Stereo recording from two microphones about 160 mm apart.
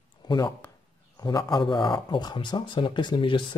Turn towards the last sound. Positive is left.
turn(degrees=30)  # may be behind; listen again after turning